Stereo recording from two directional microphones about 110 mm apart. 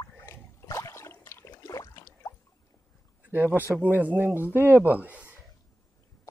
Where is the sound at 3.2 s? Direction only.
15° right (ahead or behind).